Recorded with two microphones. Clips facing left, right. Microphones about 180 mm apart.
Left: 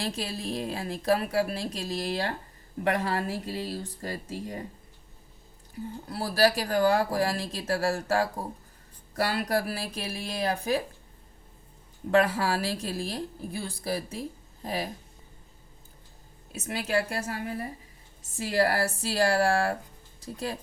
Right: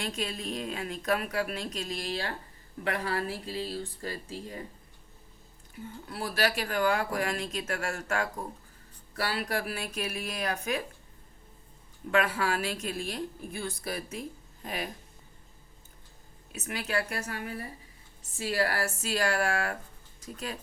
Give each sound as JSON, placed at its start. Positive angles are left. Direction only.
{"t": 0.0, "sound": "a woman's voice", "side_deg": 30}
{"t": 5.8, "sound": "a woman's voice", "side_deg": 35}
{"t": 12.1, "sound": "a woman's voice", "side_deg": 35}
{"t": 16.5, "sound": "a woman's voice", "side_deg": 30}